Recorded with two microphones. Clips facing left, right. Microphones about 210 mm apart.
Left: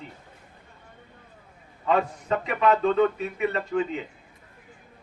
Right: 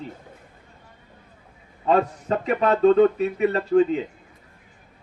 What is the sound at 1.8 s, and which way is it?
A man's voice, 35° right (ahead or behind).